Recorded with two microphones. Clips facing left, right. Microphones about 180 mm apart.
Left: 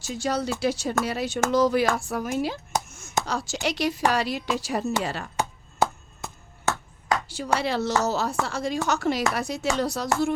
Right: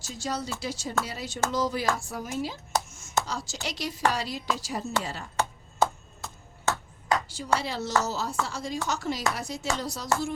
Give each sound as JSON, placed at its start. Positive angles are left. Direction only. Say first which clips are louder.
{"t": 0.1, "sound": "a woman's voice", "louder": "left 6 dB", "side_deg": 65}
{"t": 5.4, "sound": "chopping", "louder": "even", "side_deg": 15}
{"t": 7.3, "sound": "a sound", "louder": "left 6 dB", "side_deg": 65}
{"t": 7.6, "sound": "speech", "louder": "left 4 dB", "side_deg": 65}